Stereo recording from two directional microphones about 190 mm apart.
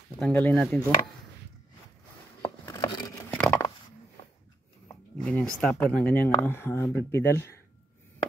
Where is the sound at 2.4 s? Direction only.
20° left (ahead or behind).